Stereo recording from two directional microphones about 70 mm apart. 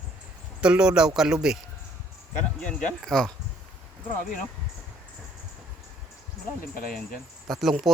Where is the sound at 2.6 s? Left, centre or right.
Centre.